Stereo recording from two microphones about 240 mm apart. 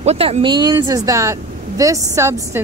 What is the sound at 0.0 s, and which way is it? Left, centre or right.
A woman's voice, right.